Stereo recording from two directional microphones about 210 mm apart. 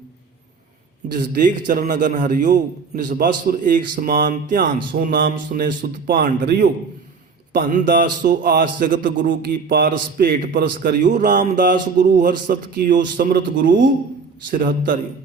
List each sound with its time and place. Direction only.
1.1 s a man's voice: 40° right (ahead or behind)